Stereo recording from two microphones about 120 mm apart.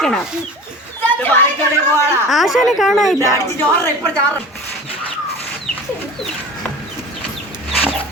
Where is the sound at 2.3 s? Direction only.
Centre (ahead or behind).